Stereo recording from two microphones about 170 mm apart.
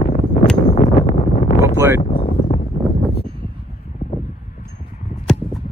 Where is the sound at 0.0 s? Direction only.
45° left (ahead or behind).